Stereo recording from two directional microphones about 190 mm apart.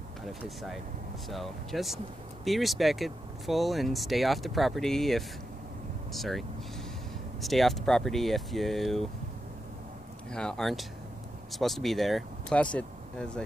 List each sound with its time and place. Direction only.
0.3 s speech: centre (ahead or behind)
7.4 s speech: centre (ahead or behind)
10.3 s speech: 5° left (ahead or behind)